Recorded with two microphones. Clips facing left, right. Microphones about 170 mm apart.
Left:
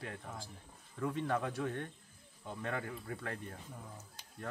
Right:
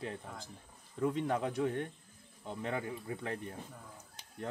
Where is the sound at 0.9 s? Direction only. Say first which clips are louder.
Right 3 dB; 20° right (ahead or behind).